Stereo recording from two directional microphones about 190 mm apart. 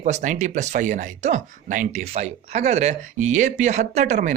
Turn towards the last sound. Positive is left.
turn(degrees=-40)  # may be behind; listen again after turning